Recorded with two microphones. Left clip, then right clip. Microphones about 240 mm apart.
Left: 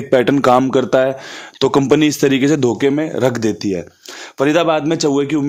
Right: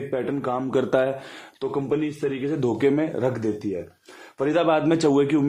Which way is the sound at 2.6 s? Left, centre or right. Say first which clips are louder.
Left 6 dB; left.